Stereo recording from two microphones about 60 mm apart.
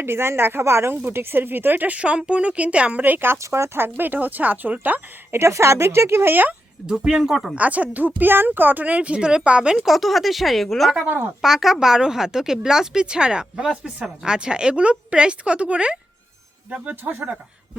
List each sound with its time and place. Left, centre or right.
0.0 s speech: right
0.6 s speech: right
3.3 s speech: right
3.8 s speech: right
5.3 s a woman's voice: right
6.8 s a woman's voice: centre
7.5 s speech: right
9.7 s speech: centre
11.0 s speech: right
11.4 s a woman's voice: centre
16.7 s speech: right